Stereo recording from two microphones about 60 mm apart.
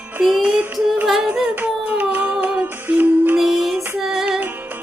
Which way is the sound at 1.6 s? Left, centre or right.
Right.